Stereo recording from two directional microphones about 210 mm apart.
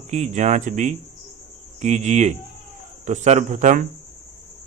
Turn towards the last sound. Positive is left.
turn(degrees=-35)  # may be behind; listen again after turning